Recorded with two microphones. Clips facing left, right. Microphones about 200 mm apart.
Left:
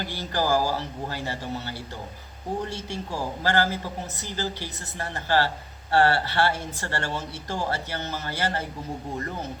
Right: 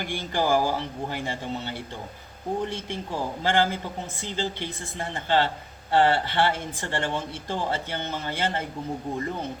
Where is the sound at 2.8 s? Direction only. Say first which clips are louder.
Even; 20° right (ahead or behind).